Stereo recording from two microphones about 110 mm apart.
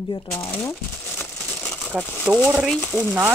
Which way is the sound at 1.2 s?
15° left (ahead or behind).